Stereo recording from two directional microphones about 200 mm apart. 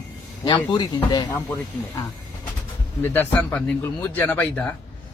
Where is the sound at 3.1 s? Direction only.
10° left (ahead or behind).